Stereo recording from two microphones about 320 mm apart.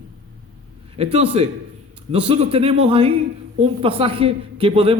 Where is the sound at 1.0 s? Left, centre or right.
Centre.